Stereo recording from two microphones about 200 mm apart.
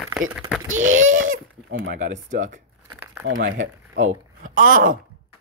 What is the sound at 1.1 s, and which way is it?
Speech, 80° right.